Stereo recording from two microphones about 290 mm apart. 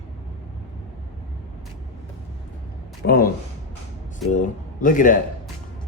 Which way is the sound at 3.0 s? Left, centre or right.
Left.